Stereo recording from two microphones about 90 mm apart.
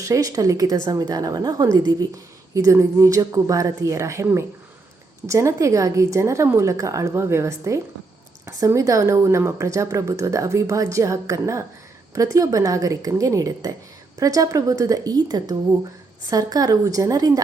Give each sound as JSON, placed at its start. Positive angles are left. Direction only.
{"t": 0.0, "sound": "a woman's voice", "side_deg": -40}